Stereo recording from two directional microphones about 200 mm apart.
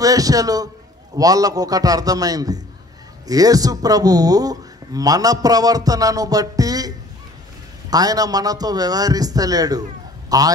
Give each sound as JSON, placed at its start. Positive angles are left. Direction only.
{"t": 0.0, "sound": "speech", "side_deg": -15}
{"t": 7.9, "sound": "a man's voice", "side_deg": -20}